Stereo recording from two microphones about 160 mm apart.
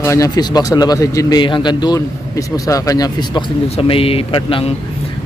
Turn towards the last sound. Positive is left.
turn(degrees=35)  # may be behind; listen again after turning